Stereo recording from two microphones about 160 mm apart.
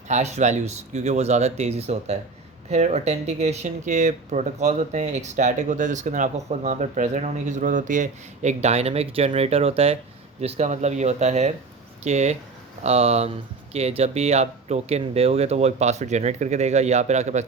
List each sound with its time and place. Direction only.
0.1 s speech: 45° right (ahead or behind)